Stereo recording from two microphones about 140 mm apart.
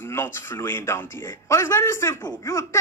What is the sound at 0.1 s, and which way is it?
A man's voice, 15° left (ahead or behind).